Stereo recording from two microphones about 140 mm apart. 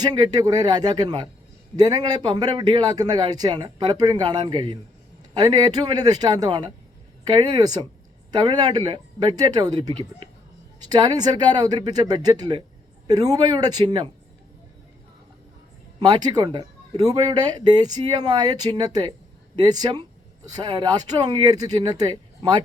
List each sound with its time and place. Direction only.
0.0 s a man's voice: 30° right (ahead or behind)
16.0 s a man's voice: 30° right (ahead or behind)